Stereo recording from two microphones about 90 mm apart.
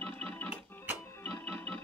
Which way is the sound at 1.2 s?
15° left (ahead or behind).